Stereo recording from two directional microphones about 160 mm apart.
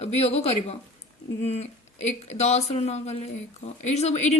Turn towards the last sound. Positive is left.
turn(degrees=45)  # may be behind; listen again after turning